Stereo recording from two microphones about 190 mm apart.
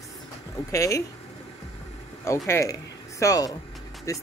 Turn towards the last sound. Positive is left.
turn(degrees=15)  # may be behind; listen again after turning